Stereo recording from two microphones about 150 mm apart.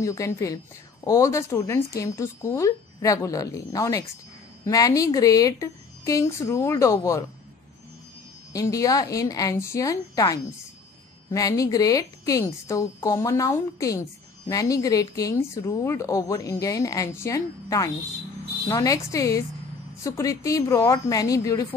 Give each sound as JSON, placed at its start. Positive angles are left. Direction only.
{"t": 0.0, "sound": "speech", "side_deg": 20}
{"t": 8.5, "sound": "speech", "side_deg": 20}